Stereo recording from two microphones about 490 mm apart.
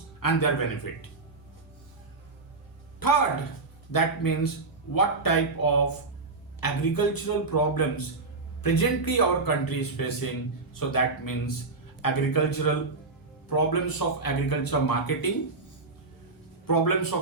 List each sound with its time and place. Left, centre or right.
0.2 s a man's voice: left
3.0 s speech: left
16.6 s speech: left